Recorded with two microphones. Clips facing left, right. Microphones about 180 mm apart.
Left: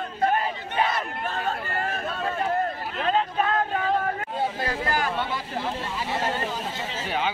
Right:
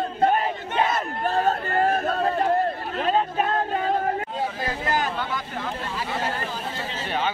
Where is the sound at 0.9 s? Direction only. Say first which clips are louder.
Right 5 dB; 40° right (ahead or behind).